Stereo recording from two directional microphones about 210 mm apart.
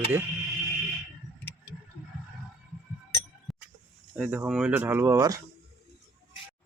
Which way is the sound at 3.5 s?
Centre (ahead or behind).